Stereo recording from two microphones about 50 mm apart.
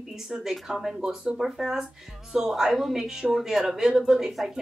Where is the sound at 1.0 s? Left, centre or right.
Centre.